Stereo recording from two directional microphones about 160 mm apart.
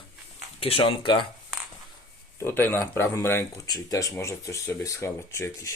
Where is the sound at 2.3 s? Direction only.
15° left (ahead or behind).